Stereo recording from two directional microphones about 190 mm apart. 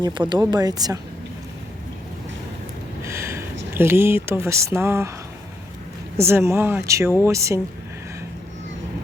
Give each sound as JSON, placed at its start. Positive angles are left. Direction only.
{"t": 0.0, "sound": "speech", "side_deg": -25}
{"t": 3.0, "sound": "a sound", "side_deg": -15}
{"t": 3.8, "sound": "speech", "side_deg": -10}
{"t": 6.1, "sound": "speech", "side_deg": -15}